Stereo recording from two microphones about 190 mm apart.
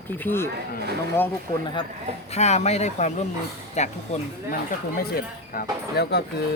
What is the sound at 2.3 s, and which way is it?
Speech, 35° left (ahead or behind).